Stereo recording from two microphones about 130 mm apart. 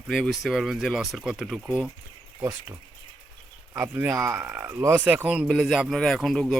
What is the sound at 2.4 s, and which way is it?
Speech, 25° right (ahead or behind).